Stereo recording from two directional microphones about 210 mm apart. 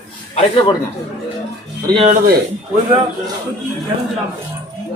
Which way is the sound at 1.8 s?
25° right (ahead or behind).